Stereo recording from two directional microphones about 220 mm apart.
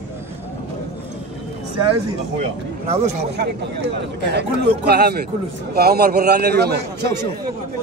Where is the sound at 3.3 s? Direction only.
50° right (ahead or behind).